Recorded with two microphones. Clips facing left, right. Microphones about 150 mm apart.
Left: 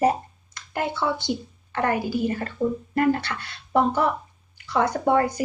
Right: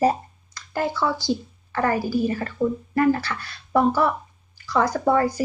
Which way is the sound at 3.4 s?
25° left (ahead or behind).